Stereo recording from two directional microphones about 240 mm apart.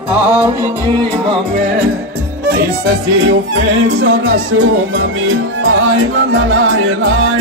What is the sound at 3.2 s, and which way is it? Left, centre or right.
Music, right.